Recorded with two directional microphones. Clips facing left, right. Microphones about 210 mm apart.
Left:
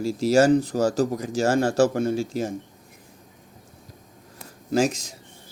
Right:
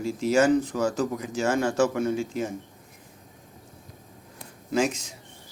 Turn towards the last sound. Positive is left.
turn(degrees=40)  # may be behind; listen again after turning